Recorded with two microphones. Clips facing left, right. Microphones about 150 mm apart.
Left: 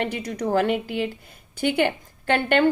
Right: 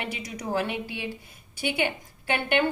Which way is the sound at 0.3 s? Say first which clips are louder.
Left 7 dB; 60° left (ahead or behind).